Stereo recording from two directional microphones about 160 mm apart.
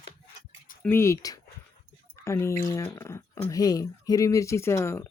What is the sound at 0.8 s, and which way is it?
Speech, 15° left (ahead or behind).